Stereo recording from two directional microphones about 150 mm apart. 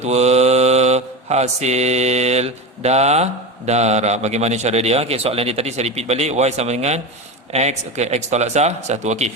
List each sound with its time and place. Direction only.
0.0 s mantra: 45° right (ahead or behind)
3.7 s a man's voice: 45° right (ahead or behind)